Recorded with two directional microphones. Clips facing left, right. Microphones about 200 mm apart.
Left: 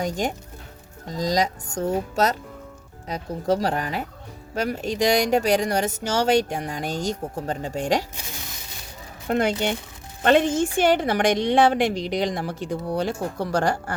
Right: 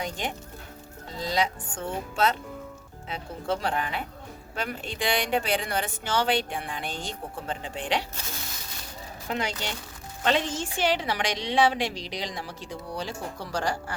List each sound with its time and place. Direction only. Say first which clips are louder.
0.0 s a woman's voice: left 7 dB; 45° left (ahead or behind)
9.3 s a woman's voice: left 9 dB; 55° left (ahead or behind)